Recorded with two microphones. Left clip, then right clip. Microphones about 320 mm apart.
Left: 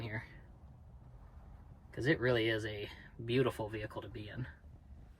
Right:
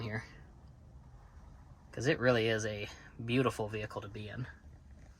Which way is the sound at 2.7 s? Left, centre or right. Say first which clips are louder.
Right 2 dB; right.